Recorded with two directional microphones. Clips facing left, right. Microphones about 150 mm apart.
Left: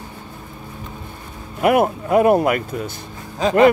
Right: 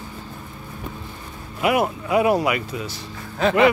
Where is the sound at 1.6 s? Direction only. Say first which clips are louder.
Left 4 dB; 50° left (ahead or behind).